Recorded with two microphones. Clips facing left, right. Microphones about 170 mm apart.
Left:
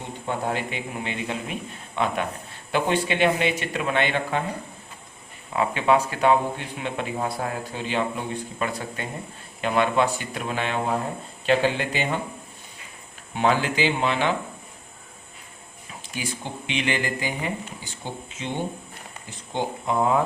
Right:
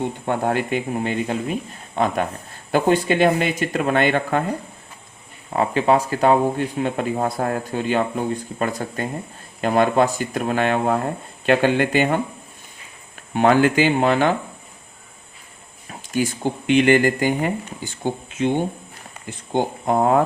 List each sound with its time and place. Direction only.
0.3 s speech: 50° right (ahead or behind)
5.5 s speech: 40° right (ahead or behind); by 12.2 s 55° right (ahead or behind)
13.3 s speech: 55° right (ahead or behind)
15.9 s speech: 50° right (ahead or behind)
19.5 s speech: 50° right (ahead or behind)